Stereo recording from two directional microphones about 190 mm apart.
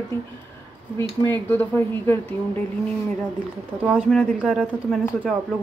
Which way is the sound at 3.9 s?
Centre (ahead or behind).